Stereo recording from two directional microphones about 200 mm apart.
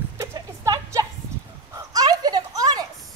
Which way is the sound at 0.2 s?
15° right (ahead or behind).